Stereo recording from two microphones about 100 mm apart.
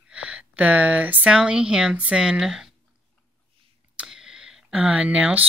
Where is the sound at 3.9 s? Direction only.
5° right (ahead or behind).